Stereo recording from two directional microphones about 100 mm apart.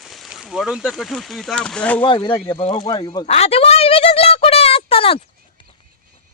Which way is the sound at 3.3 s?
90° left.